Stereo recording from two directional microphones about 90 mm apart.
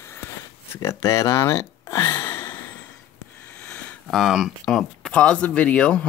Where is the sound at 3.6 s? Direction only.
15° left (ahead or behind).